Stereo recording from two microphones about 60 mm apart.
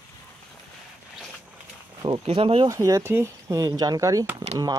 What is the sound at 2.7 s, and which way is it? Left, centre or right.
Speech, right.